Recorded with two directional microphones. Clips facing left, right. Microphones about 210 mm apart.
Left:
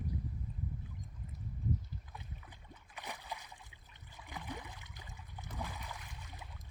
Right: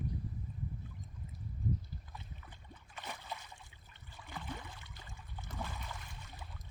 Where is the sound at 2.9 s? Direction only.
15° left (ahead or behind).